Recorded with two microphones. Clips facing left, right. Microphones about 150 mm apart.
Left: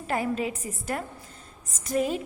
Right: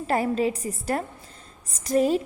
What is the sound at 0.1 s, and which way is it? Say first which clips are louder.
A woman's voice: right 4 dB; 35° right (ahead or behind).